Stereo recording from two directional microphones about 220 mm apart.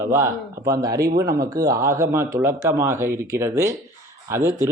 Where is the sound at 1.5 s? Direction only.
15° right (ahead or behind).